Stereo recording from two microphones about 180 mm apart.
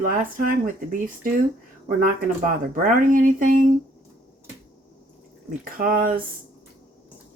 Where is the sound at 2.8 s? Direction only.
50° right (ahead or behind).